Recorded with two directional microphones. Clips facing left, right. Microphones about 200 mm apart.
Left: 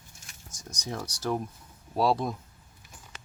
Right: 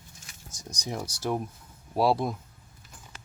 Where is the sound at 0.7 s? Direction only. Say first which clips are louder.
Right 1 dB; 15° right (ahead or behind).